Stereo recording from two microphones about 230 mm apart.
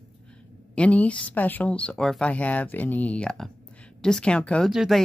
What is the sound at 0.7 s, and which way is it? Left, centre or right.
Speech, centre.